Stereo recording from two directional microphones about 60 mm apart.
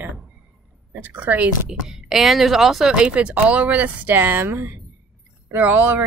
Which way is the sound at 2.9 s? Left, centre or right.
Centre.